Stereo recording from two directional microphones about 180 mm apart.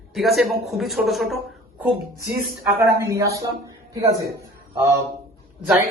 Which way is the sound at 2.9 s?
15° right (ahead or behind).